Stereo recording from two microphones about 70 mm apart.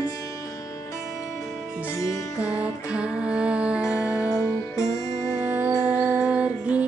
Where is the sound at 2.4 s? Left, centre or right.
Centre.